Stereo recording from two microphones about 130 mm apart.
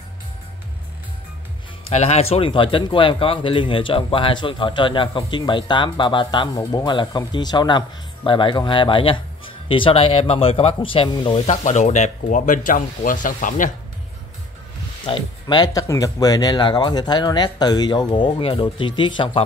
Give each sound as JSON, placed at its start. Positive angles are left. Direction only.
{"t": 1.9, "sound": "speech", "side_deg": 55}
{"t": 11.4, "sound": "speech", "side_deg": 65}
{"t": 15.0, "sound": "speech", "side_deg": 35}